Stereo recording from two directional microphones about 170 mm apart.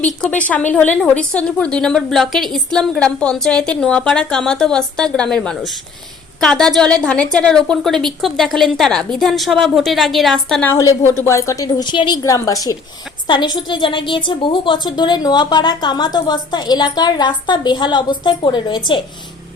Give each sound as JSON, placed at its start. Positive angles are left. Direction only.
{"t": 0.0, "sound": "a woman's voice", "side_deg": 10}